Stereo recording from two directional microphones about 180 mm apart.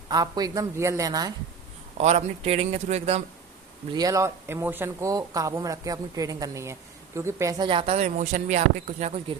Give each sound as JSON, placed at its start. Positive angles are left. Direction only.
{"t": 0.1, "sound": "a woman's voice", "side_deg": -20}
{"t": 2.0, "sound": "speech", "side_deg": -40}
{"t": 3.9, "sound": "speech", "side_deg": -20}
{"t": 7.7, "sound": "speech", "side_deg": -30}